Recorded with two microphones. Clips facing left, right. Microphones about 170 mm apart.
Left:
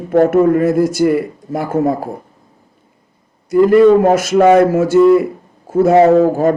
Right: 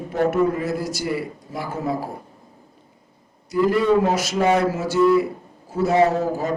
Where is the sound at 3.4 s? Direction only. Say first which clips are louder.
Left 10 dB; 50° left (ahead or behind).